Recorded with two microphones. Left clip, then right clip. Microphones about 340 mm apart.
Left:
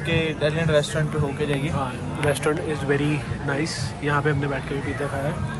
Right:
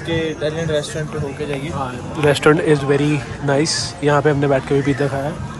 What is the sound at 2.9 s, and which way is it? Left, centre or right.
Speech, centre.